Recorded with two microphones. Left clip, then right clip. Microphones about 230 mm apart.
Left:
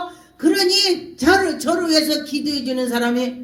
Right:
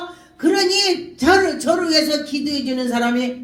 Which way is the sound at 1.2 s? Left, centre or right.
Left.